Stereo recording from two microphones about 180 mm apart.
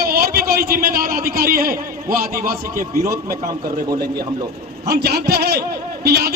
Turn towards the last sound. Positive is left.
turn(degrees=-60)  # may be behind; listen again after turning